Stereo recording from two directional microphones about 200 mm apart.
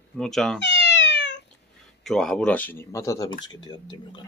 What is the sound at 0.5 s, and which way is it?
Cat, 65° left (ahead or behind).